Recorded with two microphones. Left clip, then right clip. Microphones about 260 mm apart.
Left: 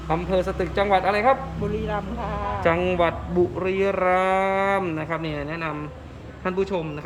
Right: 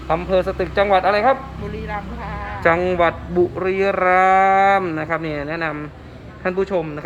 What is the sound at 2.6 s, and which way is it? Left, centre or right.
Speech, centre.